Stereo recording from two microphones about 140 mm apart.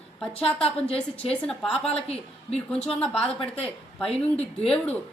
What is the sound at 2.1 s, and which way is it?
Speech, 45° left (ahead or behind).